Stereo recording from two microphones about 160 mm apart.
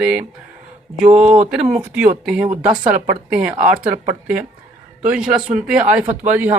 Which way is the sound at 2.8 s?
55° right (ahead or behind).